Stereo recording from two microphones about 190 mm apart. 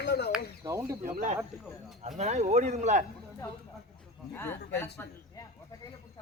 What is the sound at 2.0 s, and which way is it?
Speech, 35° right (ahead or behind).